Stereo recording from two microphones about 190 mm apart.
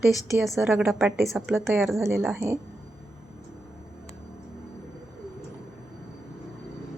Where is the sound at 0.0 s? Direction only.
Centre (ahead or behind).